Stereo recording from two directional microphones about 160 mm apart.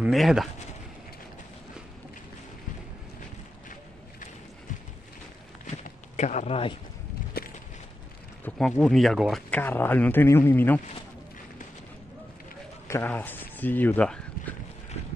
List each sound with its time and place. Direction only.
0.0 s speech: centre (ahead or behind)
5.9 s a sound: 50° left (ahead or behind)
7.3 s a sound: 75° left (ahead or behind)
8.5 s speech: 5° left (ahead or behind)
9.6 s speech: 10° left (ahead or behind)
12.8 s speech: 15° left (ahead or behind)